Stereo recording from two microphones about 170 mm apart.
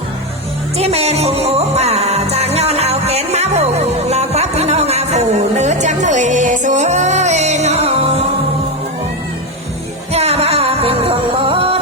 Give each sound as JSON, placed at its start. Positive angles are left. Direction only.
{"t": 0.8, "sound": "music", "side_deg": -40}
{"t": 10.1, "sound": "music", "side_deg": -40}